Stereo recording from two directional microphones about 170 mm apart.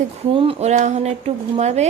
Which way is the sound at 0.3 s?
35° right (ahead or behind).